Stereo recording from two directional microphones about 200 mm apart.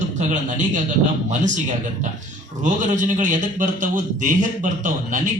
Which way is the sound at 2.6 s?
40° right (ahead or behind).